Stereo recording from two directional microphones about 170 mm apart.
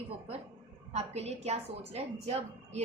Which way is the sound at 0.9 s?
40° right (ahead or behind).